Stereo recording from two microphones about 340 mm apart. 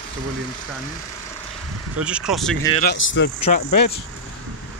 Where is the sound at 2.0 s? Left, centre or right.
Centre.